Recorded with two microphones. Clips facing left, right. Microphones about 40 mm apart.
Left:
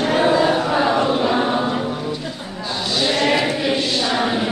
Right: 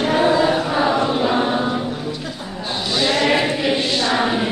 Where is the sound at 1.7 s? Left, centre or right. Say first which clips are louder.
Left 1 dB; centre.